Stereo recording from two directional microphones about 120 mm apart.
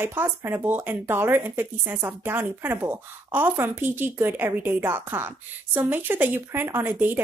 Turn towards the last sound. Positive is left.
turn(degrees=-15)  # may be behind; listen again after turning